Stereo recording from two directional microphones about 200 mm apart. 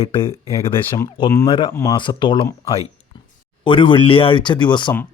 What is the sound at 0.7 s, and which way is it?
A man's voice, 15° left (ahead or behind).